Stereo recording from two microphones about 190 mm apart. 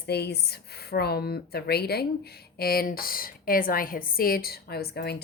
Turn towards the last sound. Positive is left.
turn(degrees=55)  # may be behind; listen again after turning